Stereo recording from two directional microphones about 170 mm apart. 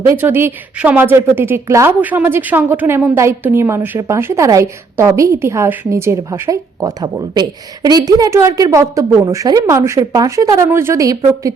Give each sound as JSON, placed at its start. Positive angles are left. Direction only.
{"t": 0.1, "sound": "a woman's voice", "side_deg": -15}